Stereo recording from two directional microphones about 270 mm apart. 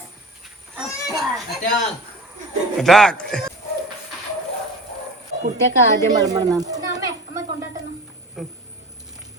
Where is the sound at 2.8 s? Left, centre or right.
Centre.